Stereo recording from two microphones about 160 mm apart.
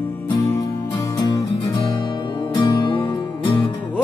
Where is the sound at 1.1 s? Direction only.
25° left (ahead or behind).